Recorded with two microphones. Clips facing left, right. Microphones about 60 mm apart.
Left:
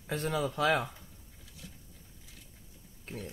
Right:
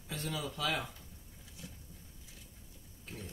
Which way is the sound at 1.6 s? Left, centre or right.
Right.